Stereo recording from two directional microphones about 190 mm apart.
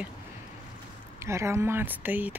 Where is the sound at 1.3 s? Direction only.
15° right (ahead or behind).